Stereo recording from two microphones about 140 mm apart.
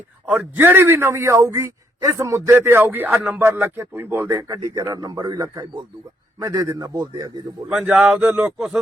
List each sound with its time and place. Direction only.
0.3 s a man's voice: 15° right (ahead or behind); by 7.4 s 30° right (ahead or behind)
7.7 s speech: 5° right (ahead or behind)